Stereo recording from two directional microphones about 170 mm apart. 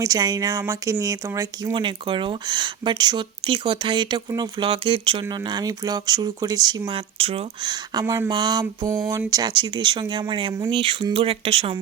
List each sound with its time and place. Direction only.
0.0 s speech: 20° right (ahead or behind)
1.7 s speech: 30° right (ahead or behind)